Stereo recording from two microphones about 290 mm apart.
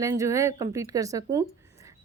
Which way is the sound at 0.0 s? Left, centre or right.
Centre.